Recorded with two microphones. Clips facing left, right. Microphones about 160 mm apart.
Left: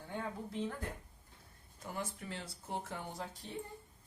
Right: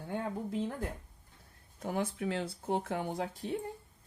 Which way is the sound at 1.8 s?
65° right (ahead or behind).